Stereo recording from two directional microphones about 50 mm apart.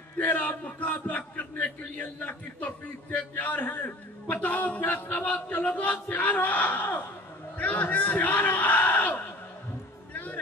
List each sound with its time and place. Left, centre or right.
0.2 s a man's voice: left
10.1 s music: left